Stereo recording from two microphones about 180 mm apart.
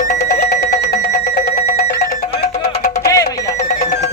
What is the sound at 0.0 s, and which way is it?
Music, 40° left (ahead or behind).